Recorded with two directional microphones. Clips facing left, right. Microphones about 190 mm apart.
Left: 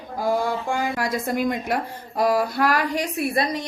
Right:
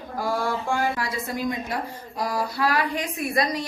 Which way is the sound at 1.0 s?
50° left (ahead or behind).